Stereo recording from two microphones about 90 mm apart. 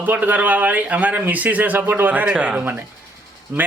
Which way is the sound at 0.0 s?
20° right (ahead or behind).